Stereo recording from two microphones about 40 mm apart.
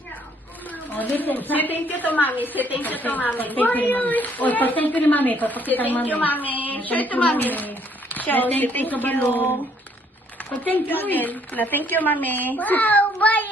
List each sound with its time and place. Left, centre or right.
0.7 s a woman's voice: left
10.6 s a woman's voice: left